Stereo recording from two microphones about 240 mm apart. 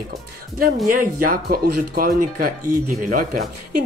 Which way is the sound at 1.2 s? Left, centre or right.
Right.